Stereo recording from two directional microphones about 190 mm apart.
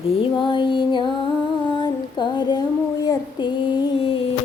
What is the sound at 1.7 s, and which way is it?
Female singing, 25° left (ahead or behind).